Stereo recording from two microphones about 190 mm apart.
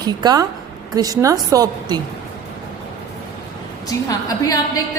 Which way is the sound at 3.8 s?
20° left (ahead or behind).